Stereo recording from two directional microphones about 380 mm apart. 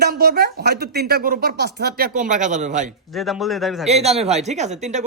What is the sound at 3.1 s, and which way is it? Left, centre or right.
Speech, centre.